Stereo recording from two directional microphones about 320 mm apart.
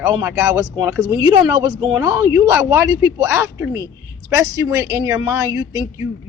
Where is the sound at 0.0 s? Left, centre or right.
Centre.